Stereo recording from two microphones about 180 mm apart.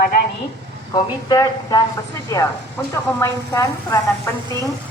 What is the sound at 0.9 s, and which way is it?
A woman's voice, 20° left (ahead or behind).